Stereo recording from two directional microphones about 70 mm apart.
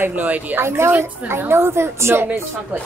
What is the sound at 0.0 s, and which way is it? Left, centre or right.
Speech, right.